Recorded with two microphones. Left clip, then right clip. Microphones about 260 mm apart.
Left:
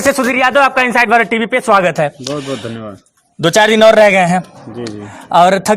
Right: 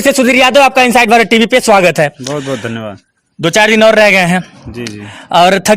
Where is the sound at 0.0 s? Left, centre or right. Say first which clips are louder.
Right 4 dB; right.